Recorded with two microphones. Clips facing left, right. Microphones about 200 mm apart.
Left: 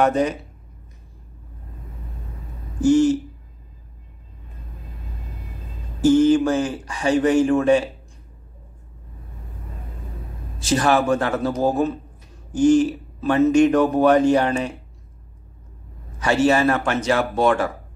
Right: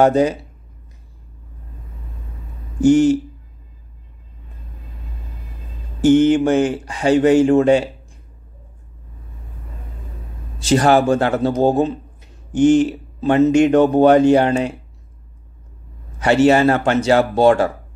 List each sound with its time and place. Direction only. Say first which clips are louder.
0.0 s speech: right 5 dB; 30° right (ahead or behind)
2.8 s speech: right 3 dB; 30° right (ahead or behind)
6.0 s speech: right 2 dB; 25° right (ahead or behind)
10.6 s speech: right 5 dB; 30° right (ahead or behind)
16.2 s speech: right 5 dB; 30° right (ahead or behind)